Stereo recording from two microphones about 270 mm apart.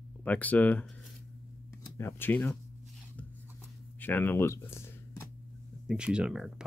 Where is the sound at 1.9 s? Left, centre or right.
Centre.